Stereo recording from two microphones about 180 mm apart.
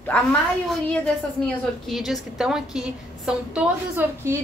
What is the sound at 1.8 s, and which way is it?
A woman's voice, centre (ahead or behind).